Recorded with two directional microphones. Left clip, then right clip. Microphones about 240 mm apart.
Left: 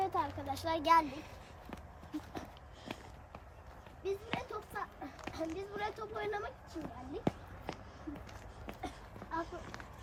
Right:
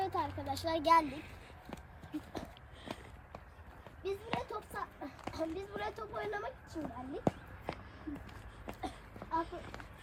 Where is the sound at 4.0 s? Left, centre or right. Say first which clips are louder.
Even; centre.